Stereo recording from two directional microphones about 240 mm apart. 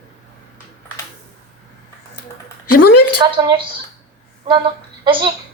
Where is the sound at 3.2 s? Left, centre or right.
Centre.